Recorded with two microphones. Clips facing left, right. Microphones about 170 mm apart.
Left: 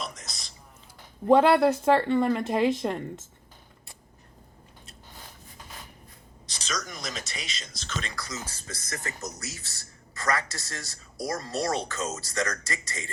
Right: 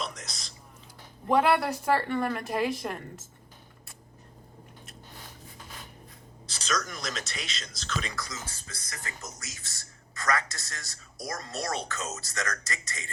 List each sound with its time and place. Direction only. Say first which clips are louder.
0.0 s whispering: right 1 dB; centre (ahead or behind)
1.3 s speech: left 5 dB; 30° left (ahead or behind)
6.7 s speech: right 2 dB; centre (ahead or behind)
8.6 s speech: left 6 dB; 45° left (ahead or behind)
10.2 s speech: left 1 dB; 30° left (ahead or behind)